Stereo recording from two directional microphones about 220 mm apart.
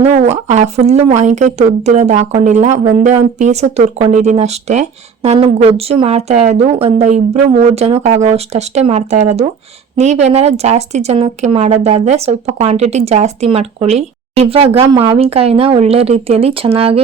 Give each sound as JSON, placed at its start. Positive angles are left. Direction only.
{"t": 0.0, "sound": "a woman's voice", "side_deg": -30}